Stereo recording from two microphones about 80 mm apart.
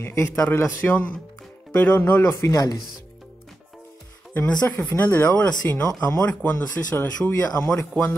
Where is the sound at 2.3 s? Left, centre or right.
Left.